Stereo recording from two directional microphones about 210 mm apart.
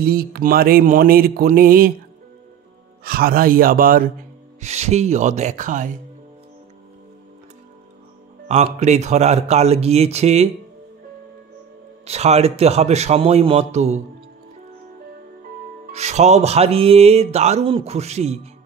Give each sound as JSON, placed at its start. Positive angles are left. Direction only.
{"t": 0.0, "sound": "a sound", "side_deg": -45}
{"t": 3.0, "sound": "a sound", "side_deg": -45}
{"t": 4.6, "sound": "music", "side_deg": -30}
{"t": 8.5, "sound": "music", "side_deg": -30}
{"t": 12.1, "sound": "music", "side_deg": -30}
{"t": 15.9, "sound": "music", "side_deg": -30}